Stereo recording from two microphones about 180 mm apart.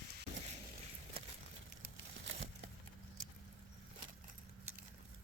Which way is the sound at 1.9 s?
90° right.